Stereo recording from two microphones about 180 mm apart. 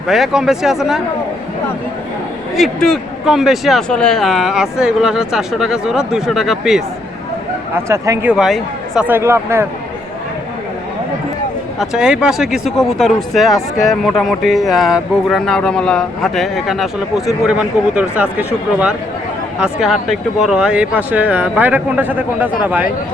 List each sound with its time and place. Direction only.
0.1 s speech: centre (ahead or behind)
2.6 s speech: centre (ahead or behind)
7.9 s speech: 15° right (ahead or behind)
8.3 s speech: centre (ahead or behind)
11.8 s speech: 5° right (ahead or behind)